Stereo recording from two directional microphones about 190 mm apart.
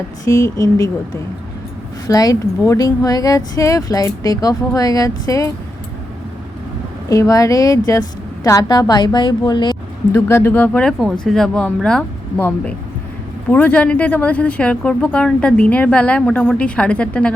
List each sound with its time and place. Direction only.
0.3 s speech: 15° left (ahead or behind)
2.0 s speech: 20° left (ahead or behind)
7.1 s speech: 15° left (ahead or behind)